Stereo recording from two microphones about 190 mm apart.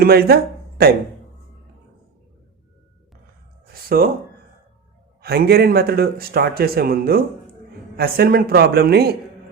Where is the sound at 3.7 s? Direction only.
50° right (ahead or behind).